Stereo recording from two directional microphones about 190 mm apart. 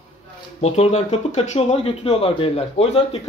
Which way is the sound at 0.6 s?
35° left (ahead or behind).